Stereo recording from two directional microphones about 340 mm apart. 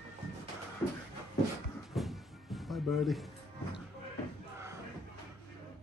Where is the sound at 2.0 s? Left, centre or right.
Centre.